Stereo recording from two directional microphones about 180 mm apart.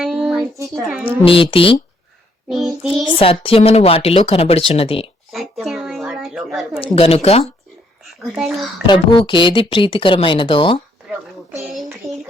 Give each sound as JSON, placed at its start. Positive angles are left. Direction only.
{"t": 0.0, "sound": "a sound", "side_deg": 0}
{"t": 0.5, "sound": "a child's voice", "side_deg": -15}
{"t": 1.2, "sound": "speech", "side_deg": 30}
{"t": 2.5, "sound": "child singing", "side_deg": 0}
{"t": 3.4, "sound": "speech", "side_deg": 35}
{"t": 5.3, "sound": "a sound", "side_deg": 0}
{"t": 6.8, "sound": "speech", "side_deg": 30}
{"t": 8.2, "sound": "child singing", "side_deg": 0}
{"t": 8.9, "sound": "speech", "side_deg": 25}
{"t": 11.5, "sound": "child singing", "side_deg": 0}